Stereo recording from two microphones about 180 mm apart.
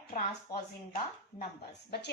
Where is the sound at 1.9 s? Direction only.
65° left (ahead or behind).